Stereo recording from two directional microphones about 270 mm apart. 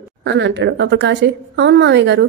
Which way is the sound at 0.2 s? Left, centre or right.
Right.